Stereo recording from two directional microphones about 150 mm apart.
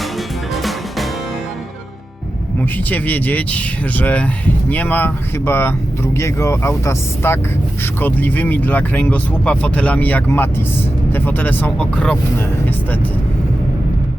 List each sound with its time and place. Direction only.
0.5 s music: centre (ahead or behind)
2.6 s speech: 10° left (ahead or behind)